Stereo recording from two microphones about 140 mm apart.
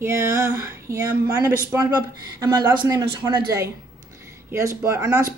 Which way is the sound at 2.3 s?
30° right (ahead or behind).